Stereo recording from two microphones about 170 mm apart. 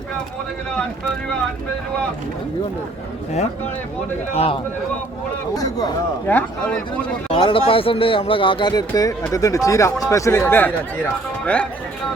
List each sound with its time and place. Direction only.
4.4 s a man's voice: 35° left (ahead or behind)
5.5 s speech: 20° left (ahead or behind)
6.2 s speech: 10° left (ahead or behind)
7.3 s speech: 30° left (ahead or behind); by 11.7 s 5° left (ahead or behind)